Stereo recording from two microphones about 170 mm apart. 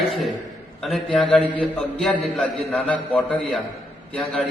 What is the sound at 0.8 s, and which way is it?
A man's voice, centre (ahead or behind).